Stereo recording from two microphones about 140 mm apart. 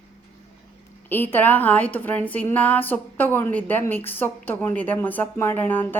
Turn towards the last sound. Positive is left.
turn(degrees=15)  # may be behind; listen again after turning